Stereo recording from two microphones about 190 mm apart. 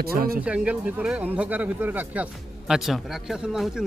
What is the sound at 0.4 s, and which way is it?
Speech, 5° right (ahead or behind).